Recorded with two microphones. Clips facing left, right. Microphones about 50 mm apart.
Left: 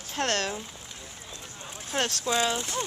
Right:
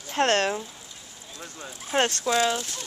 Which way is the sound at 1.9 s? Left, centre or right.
Centre.